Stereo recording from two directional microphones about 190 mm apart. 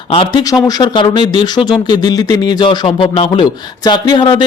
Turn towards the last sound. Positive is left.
turn(degrees=25)  # may be behind; listen again after turning